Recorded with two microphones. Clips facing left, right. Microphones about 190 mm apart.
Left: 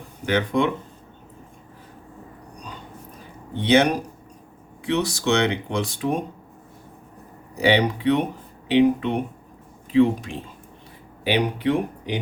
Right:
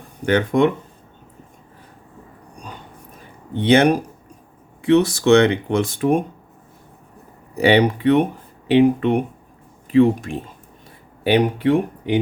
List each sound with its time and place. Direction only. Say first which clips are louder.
0.3 s speech: right 5 dB; 50° right (ahead or behind)
3.6 s speech: right 4 dB; 55° right (ahead or behind)
7.6 s speech: right 4 dB; 55° right (ahead or behind)